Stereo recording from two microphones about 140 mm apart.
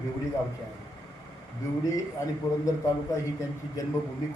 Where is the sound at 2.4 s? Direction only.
20° left (ahead or behind).